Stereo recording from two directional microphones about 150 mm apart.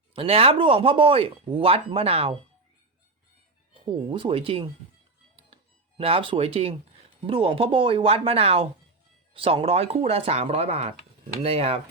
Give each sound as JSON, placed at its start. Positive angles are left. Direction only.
{"t": 0.1, "sound": "speech", "side_deg": -40}
{"t": 3.8, "sound": "speech", "side_deg": -35}
{"t": 6.0, "sound": "speech", "side_deg": -40}